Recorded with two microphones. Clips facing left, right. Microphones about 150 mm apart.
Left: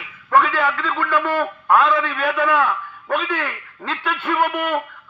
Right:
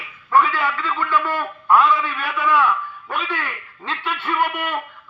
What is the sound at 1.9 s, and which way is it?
A man's voice, 50° left (ahead or behind).